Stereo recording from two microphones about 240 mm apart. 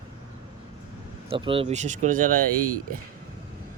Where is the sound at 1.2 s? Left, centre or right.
Right.